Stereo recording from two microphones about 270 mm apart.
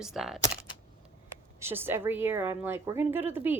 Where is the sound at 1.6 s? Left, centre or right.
Centre.